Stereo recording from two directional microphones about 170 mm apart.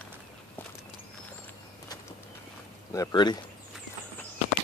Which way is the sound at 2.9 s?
20° left (ahead or behind).